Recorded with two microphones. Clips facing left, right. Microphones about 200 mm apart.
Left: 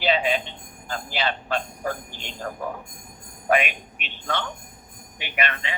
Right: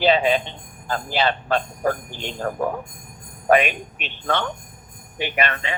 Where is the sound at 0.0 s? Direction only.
45° right (ahead or behind).